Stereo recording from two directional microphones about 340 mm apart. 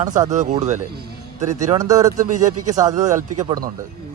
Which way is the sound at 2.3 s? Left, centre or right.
Right.